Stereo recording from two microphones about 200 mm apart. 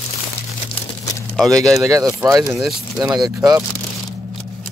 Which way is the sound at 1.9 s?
15° right (ahead or behind).